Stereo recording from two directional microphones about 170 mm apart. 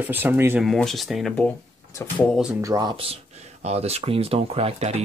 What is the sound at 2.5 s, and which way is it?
Speech, 20° right (ahead or behind).